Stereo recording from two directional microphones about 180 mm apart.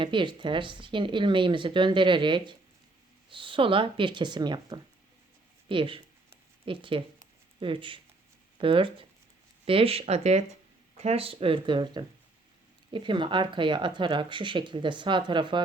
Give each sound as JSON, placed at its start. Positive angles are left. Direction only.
{"t": 0.0, "sound": "speech", "side_deg": -25}